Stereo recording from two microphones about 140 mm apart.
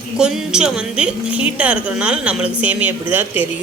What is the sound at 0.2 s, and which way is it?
A woman's voice, 5° right (ahead or behind).